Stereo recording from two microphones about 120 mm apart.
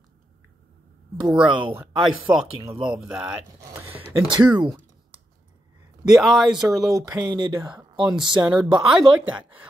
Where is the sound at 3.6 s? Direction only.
15° right (ahead or behind).